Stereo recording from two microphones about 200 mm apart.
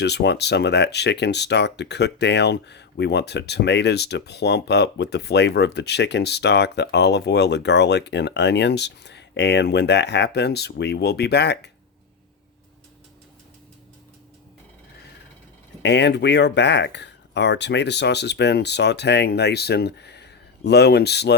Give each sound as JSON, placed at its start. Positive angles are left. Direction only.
{"t": 0.0, "sound": "speech", "side_deg": 60}
{"t": 15.8, "sound": "speech", "side_deg": 60}